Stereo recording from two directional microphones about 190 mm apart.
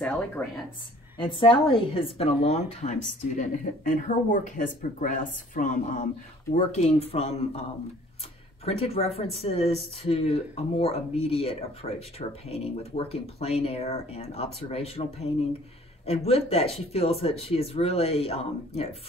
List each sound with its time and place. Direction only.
1.1 s a woman's voice: 25° left (ahead or behind)
8.6 s speech: 30° left (ahead or behind)